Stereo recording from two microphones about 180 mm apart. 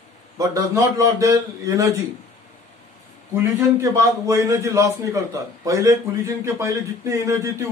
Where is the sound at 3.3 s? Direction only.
15° right (ahead or behind).